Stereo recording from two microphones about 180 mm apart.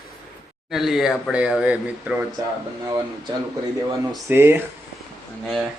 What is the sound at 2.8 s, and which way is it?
Speech, 20° right (ahead or behind).